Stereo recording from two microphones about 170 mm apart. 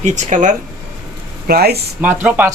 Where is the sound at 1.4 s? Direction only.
65° right (ahead or behind).